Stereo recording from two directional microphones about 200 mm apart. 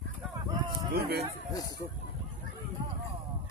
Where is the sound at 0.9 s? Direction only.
50° right (ahead or behind).